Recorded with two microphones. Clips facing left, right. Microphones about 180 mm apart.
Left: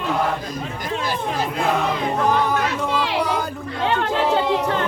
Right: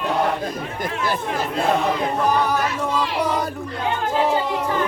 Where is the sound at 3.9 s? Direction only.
75° left (ahead or behind).